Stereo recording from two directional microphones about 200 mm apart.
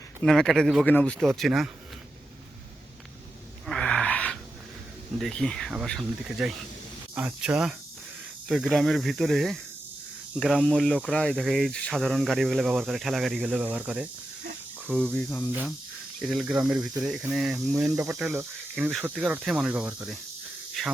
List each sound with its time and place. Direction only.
0.2 s speech: centre (ahead or behind)
3.7 s wheeze: 5° left (ahead or behind)
5.2 s speech: 5° left (ahead or behind)
14.8 s speech: 5° left (ahead or behind)
17.9 s speech: 15° right (ahead or behind); by 20.9 s centre (ahead or behind)